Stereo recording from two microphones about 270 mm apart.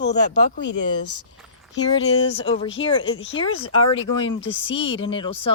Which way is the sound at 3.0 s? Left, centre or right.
Left.